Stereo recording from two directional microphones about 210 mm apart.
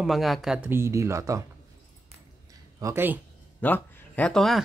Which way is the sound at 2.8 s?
10° right (ahead or behind).